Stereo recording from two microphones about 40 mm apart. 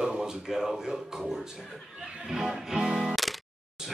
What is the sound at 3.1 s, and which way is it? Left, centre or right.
Music, centre.